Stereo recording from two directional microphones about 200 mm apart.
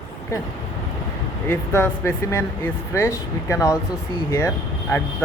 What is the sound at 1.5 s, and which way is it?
Speech, 10° left (ahead or behind).